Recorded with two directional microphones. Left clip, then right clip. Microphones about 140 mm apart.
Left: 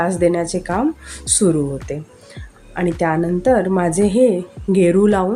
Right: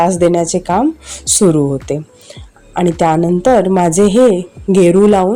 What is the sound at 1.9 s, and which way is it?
Speech, 45° right (ahead or behind).